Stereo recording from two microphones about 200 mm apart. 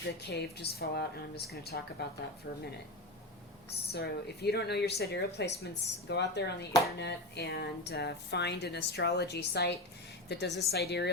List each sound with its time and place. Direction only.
0.3 s speech: 55° left (ahead or behind)
3.9 s speech: 55° left (ahead or behind)